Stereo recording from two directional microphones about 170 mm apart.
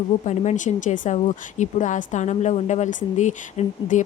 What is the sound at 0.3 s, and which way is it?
A woman's voice, 45° left (ahead or behind).